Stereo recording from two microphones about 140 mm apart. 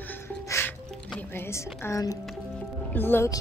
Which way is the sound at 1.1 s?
15° left (ahead or behind).